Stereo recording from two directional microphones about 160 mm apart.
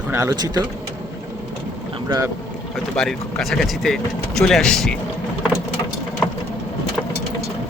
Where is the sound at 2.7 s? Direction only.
5° left (ahead or behind).